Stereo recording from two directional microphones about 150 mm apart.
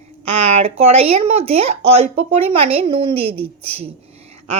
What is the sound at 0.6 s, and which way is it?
Speech, 40° right (ahead or behind).